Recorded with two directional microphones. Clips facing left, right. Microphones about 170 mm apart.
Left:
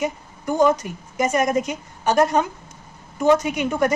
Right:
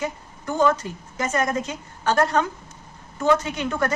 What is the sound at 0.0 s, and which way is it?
A woman's voice, 15° left (ahead or behind).